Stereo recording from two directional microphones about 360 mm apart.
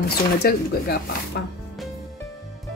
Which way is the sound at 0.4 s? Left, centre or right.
Left.